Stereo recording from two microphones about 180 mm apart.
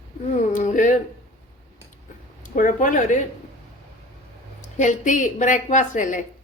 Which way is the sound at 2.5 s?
45° left (ahead or behind).